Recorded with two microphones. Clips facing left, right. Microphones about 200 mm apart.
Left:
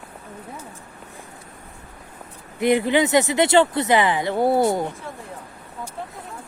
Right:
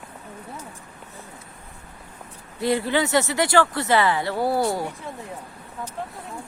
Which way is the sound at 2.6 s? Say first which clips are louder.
Left 4 dB; 20° left (ahead or behind).